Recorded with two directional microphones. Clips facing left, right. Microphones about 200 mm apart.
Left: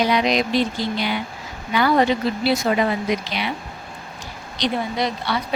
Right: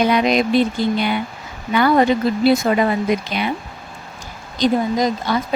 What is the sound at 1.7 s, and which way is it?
Speech, 50° right (ahead or behind).